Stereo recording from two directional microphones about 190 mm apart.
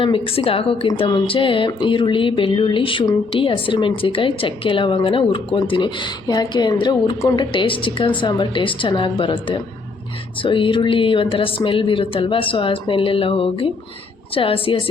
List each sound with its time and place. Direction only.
0.0 s speech: 30° left (ahead or behind)